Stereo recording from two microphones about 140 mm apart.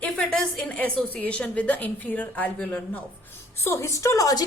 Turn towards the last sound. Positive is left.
turn(degrees=25)  # may be behind; listen again after turning